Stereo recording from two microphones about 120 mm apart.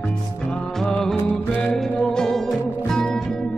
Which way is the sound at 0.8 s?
5° left (ahead or behind).